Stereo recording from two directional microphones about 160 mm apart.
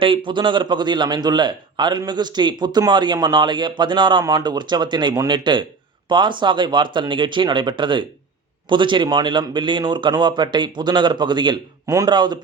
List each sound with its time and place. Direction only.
0.0 s speech: 30° right (ahead or behind)